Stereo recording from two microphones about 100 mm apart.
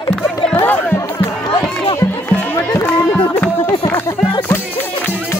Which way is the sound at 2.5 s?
30° left (ahead or behind).